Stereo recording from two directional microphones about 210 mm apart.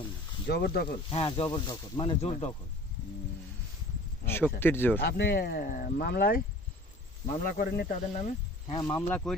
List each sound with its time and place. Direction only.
0.4 s speech: 50° left (ahead or behind)
1.1 s speech: 25° left (ahead or behind)
4.3 s speech: 10° left (ahead or behind)
4.9 s speech: 50° left (ahead or behind)
7.4 s speech: 40° left (ahead or behind)
8.6 s speech: 20° left (ahead or behind)
9.0 s speech: 10° left (ahead or behind)